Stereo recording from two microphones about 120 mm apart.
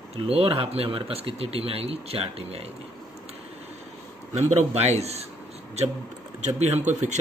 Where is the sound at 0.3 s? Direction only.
50° right (ahead or behind).